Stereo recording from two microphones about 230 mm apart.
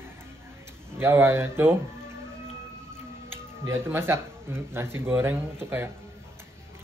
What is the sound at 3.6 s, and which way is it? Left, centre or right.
Speech, centre.